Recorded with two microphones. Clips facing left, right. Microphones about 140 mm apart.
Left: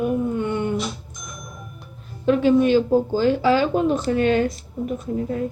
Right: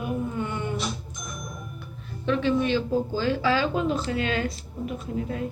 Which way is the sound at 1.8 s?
45° left (ahead or behind).